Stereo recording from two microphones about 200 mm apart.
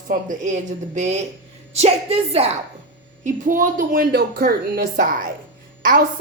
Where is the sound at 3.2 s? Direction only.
40° right (ahead or behind).